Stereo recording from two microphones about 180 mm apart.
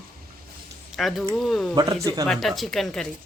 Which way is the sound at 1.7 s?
20° right (ahead or behind).